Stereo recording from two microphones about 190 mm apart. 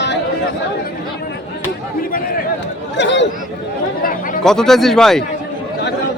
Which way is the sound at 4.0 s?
50° left (ahead or behind).